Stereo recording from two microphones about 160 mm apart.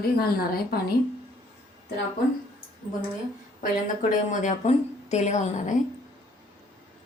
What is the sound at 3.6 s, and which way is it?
Speech, 55° left (ahead or behind).